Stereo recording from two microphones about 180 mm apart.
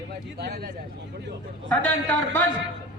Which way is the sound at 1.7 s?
10° left (ahead or behind).